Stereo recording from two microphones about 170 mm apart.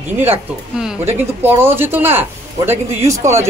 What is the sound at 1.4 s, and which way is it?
Speech, 15° right (ahead or behind).